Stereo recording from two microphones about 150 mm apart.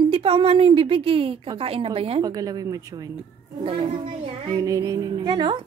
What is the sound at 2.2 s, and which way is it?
Speech, 25° right (ahead or behind).